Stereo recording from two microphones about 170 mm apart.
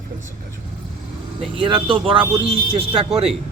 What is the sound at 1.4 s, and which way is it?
A man's voice, 30° right (ahead or behind).